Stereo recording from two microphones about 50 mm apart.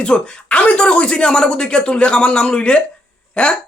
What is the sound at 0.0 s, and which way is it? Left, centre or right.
Speech, left.